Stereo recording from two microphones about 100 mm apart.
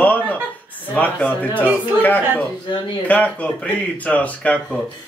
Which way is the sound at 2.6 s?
55° left (ahead or behind).